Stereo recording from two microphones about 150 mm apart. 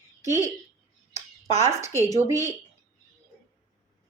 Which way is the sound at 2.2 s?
20° right (ahead or behind).